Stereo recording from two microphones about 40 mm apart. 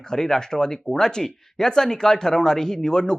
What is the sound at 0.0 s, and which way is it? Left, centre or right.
Speech, centre.